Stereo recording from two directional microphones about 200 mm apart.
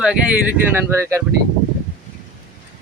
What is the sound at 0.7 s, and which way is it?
Speech, 15° right (ahead or behind).